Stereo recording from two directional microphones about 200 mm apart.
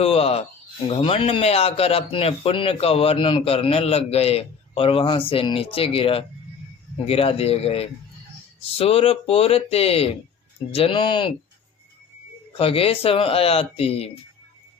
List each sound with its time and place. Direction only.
0.0 s speech: 30° left (ahead or behind)
12.5 s speech: 30° left (ahead or behind)